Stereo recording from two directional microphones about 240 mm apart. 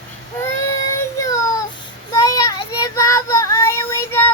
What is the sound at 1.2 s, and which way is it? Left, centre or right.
Child singing, centre.